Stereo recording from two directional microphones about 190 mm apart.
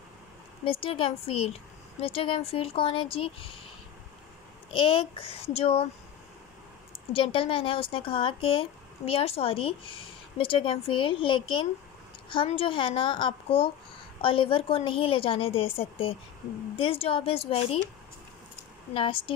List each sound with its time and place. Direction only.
0.7 s a woman's voice: 30° left (ahead or behind)
4.7 s a woman's voice: 30° left (ahead or behind)
7.1 s a woman's voice: 30° left (ahead or behind)
18.9 s speech: 25° left (ahead or behind)